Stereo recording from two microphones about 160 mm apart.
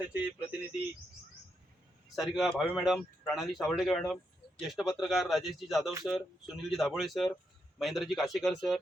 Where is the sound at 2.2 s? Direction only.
Centre (ahead or behind).